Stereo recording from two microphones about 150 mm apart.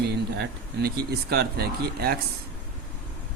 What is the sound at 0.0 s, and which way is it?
Speech, 90° right.